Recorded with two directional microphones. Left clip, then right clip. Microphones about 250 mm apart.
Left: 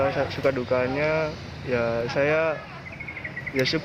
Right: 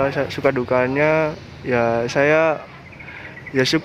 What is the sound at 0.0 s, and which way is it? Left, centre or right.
Speech, right.